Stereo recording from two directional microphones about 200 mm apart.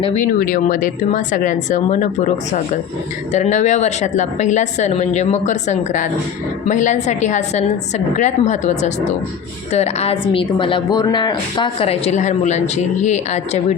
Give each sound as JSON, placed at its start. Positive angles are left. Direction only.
{"t": 0.0, "sound": "a woman's voice", "side_deg": 30}
{"t": 0.3, "sound": "a woman's voice", "side_deg": 45}